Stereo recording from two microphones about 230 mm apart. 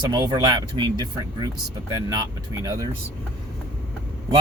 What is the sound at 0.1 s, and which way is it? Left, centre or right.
Speech, centre.